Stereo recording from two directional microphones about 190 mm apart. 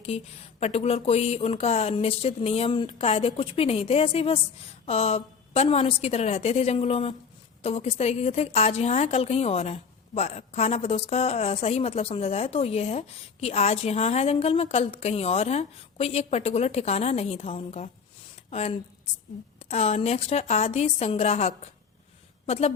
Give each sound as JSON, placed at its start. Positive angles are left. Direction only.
{"t": 0.1, "sound": "a woman's voice", "side_deg": 30}